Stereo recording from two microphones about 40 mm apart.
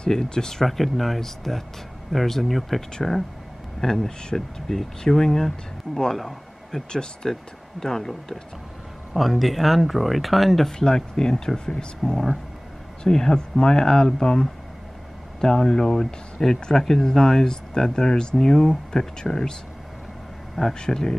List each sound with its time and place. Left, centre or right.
0.0 s speech: centre
0.7 s speech: centre
6.1 s a sound: centre
6.9 s speech: centre
9.1 s speech: centre
10.8 s speech: centre
20.8 s speech: centre